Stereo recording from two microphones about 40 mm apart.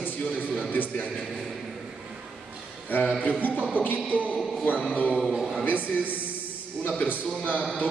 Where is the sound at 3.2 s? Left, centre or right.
Left.